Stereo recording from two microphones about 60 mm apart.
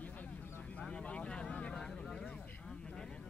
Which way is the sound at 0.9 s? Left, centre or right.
Centre.